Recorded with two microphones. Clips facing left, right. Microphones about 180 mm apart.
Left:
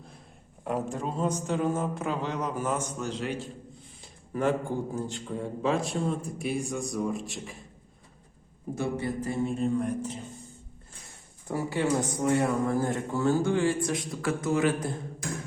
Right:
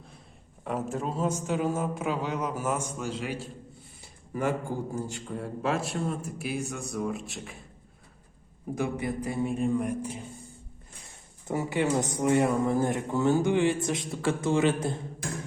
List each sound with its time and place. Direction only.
0.6 s a man's voice: centre (ahead or behind)
4.0 s a sound: 10° right (ahead or behind)
4.9 s a man's voice: 10° right (ahead or behind)
8.7 s a man's voice: 15° right (ahead or behind)
11.4 s speech: 20° right (ahead or behind)